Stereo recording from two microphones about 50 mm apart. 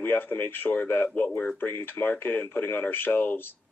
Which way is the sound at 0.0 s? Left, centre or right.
Left.